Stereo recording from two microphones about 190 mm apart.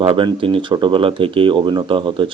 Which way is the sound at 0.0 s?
25° right (ahead or behind).